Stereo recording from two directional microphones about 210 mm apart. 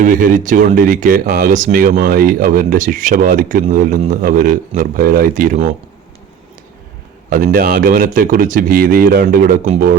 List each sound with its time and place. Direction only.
0.0 s speech: 40° right (ahead or behind)
7.3 s speech: 45° right (ahead or behind)